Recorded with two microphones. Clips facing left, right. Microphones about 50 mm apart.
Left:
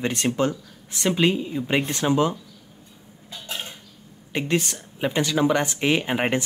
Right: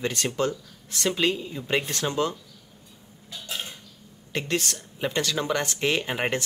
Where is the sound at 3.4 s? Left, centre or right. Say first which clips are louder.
Left 1 dB; centre.